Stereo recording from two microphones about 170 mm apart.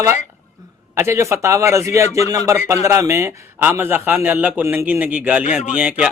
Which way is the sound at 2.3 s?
20° right (ahead or behind).